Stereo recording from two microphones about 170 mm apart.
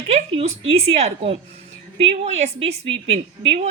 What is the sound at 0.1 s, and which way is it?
A woman's voice, 35° right (ahead or behind).